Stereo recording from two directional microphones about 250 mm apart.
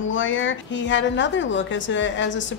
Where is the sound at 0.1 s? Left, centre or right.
Left.